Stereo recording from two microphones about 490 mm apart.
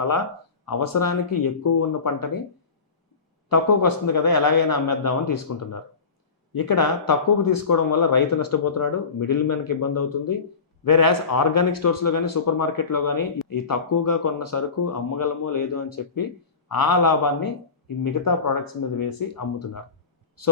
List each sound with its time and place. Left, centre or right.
0.7 s speech: left
3.5 s speech: left
20.4 s speech: left